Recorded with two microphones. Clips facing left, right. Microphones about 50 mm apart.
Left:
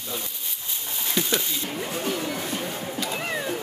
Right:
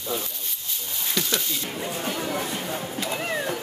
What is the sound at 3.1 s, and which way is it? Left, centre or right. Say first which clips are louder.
Cat: right 3 dB; centre.